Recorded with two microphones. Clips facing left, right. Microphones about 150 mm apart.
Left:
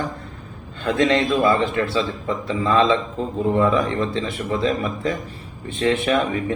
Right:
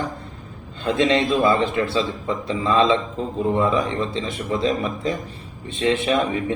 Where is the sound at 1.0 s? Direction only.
15° right (ahead or behind).